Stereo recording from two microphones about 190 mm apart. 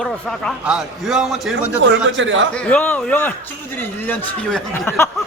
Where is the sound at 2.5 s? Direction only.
5° left (ahead or behind).